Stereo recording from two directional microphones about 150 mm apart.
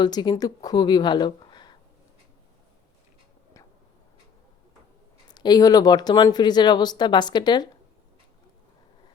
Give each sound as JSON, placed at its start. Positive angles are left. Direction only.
{"t": 0.0, "sound": "speech", "side_deg": 30}
{"t": 5.3, "sound": "speech", "side_deg": 30}